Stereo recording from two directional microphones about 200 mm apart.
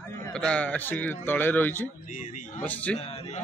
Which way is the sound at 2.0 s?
40° left (ahead or behind).